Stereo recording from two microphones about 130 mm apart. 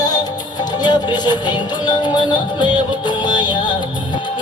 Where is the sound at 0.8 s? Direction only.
35° left (ahead or behind).